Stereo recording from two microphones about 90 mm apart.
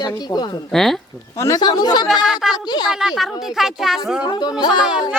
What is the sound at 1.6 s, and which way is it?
Speech, 50° left (ahead or behind).